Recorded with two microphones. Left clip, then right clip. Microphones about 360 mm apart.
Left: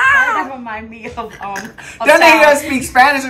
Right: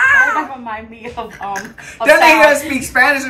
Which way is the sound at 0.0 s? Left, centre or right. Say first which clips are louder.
Even; centre.